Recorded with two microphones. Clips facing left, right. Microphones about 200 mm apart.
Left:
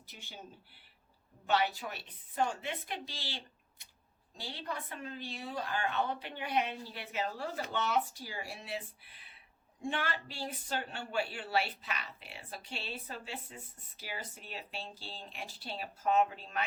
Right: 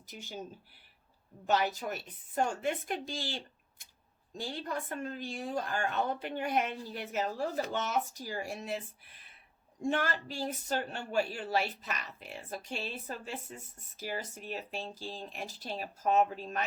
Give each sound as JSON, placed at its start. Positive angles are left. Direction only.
{"t": 0.1, "sound": "speech", "side_deg": -40}
{"t": 1.5, "sound": "speech", "side_deg": -45}